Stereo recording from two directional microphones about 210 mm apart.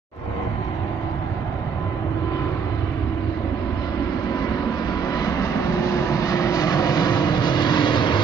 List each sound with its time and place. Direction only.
5.0 s vehicle: 15° left (ahead or behind)